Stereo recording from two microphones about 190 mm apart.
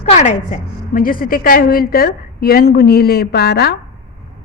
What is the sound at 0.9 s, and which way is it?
A woman's voice, 50° left (ahead or behind).